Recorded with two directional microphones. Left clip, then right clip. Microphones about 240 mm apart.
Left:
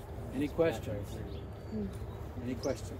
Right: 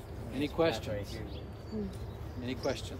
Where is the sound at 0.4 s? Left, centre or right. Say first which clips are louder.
Right 1 dB; centre.